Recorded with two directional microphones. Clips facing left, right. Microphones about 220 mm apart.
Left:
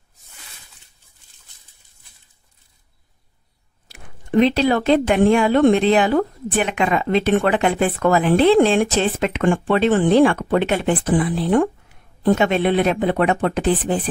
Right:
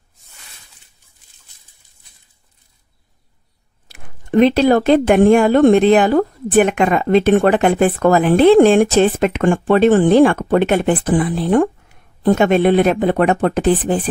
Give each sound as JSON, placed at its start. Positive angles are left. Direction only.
{"t": 4.3, "sound": "speech", "side_deg": -50}